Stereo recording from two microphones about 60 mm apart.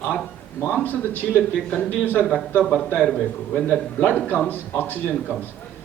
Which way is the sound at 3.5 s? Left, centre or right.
Left.